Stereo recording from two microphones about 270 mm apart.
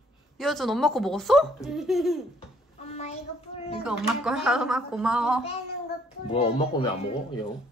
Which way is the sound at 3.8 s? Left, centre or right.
Centre.